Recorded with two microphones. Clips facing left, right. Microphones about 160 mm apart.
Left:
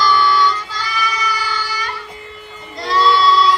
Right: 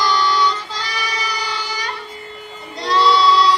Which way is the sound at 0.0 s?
20° right (ahead or behind).